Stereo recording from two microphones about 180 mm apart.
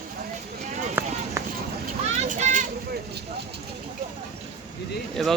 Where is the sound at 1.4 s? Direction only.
15° right (ahead or behind).